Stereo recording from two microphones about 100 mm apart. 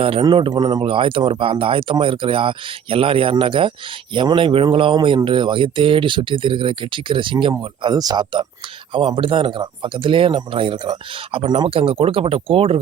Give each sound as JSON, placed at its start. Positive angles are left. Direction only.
{"t": 0.0, "sound": "speech", "side_deg": -70}
{"t": 0.3, "sound": "speech", "side_deg": -60}
{"t": 0.5, "sound": "speech", "side_deg": -40}
{"t": 0.8, "sound": "speech", "side_deg": -65}
{"t": 7.9, "sound": "speech", "side_deg": -45}
{"t": 8.9, "sound": "speech", "side_deg": -60}
{"t": 11.4, "sound": "speech", "side_deg": -50}
{"t": 11.7, "sound": "speech", "side_deg": -70}